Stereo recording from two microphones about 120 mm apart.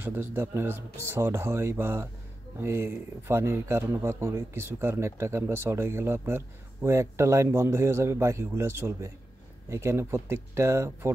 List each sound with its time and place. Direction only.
0.0 s speech: 15° right (ahead or behind)